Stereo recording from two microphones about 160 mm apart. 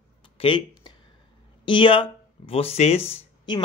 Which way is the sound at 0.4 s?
35° left (ahead or behind).